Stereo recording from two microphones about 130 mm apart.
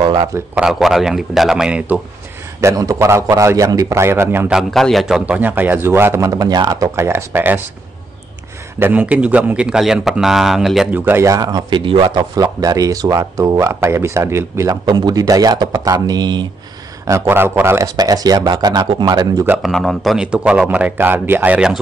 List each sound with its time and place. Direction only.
0.0 s a man's voice: 40° right (ahead or behind)
0.6 s a man's voice: 5° right (ahead or behind)
2.6 s speech: 25° right (ahead or behind)
4.5 s a man's voice: centre (ahead or behind); by 7.6 s 15° right (ahead or behind)
8.7 s a man's voice: 15° right (ahead or behind)
10.9 s speech: 15° right (ahead or behind)
14.9 s speech: 30° right (ahead or behind)
17.0 s speech: 20° right (ahead or behind)
17.8 s speech: 30° right (ahead or behind)
19.6 s a man's voice: 5° left (ahead or behind)